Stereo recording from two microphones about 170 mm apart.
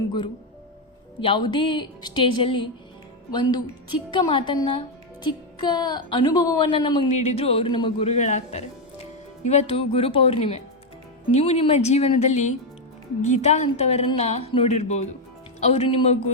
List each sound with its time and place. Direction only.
1.2 s a woman's voice: 30° left (ahead or behind)
4.1 s a woman's voice: 30° left (ahead or behind)
7.1 s a woman's voice: 40° left (ahead or behind)